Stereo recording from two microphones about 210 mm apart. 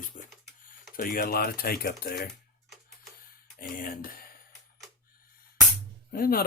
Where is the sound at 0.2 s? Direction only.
35° left (ahead or behind).